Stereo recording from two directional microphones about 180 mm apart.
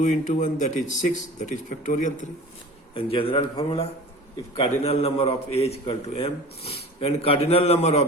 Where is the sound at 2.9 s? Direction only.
30° left (ahead or behind).